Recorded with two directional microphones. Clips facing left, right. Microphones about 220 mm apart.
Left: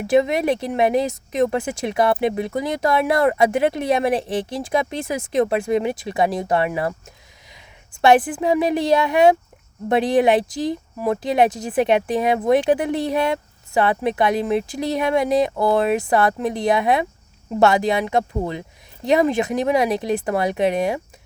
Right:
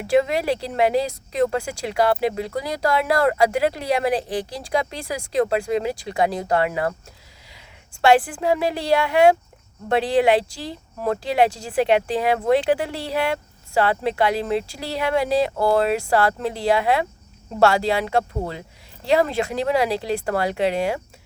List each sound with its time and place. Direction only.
0.1 s speech: 20° left (ahead or behind)
8.0 s speech: 20° left (ahead or behind)